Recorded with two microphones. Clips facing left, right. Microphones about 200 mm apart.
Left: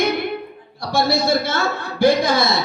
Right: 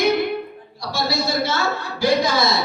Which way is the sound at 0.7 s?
55° left (ahead or behind).